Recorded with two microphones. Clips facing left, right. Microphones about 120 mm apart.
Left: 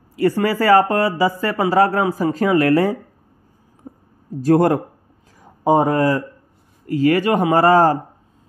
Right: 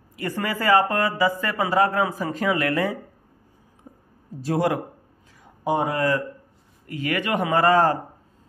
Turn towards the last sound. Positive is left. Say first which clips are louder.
# left 5 dB
turn(degrees=35)  # may be behind; listen again after turning